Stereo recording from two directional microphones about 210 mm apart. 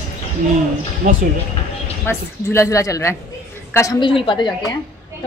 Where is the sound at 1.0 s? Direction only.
40° right (ahead or behind).